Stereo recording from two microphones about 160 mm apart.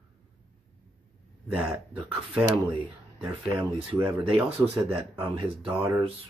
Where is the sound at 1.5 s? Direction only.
10° right (ahead or behind).